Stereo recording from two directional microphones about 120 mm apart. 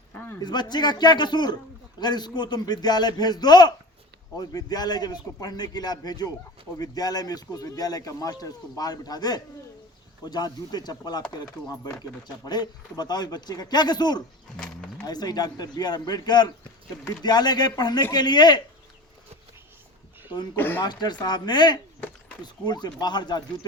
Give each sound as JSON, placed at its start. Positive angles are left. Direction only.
{"t": 0.1, "sound": "a sound", "side_deg": 15}
{"t": 0.3, "sound": "speech", "side_deg": 35}
{"t": 14.5, "sound": "a sound", "side_deg": 5}
{"t": 15.0, "sound": "speech", "side_deg": 35}
{"t": 20.6, "sound": "speech", "side_deg": 15}
{"t": 20.8, "sound": "speech", "side_deg": 35}